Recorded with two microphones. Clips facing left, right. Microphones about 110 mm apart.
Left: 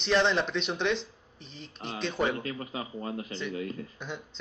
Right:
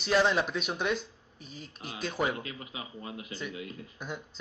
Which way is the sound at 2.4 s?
40° left (ahead or behind).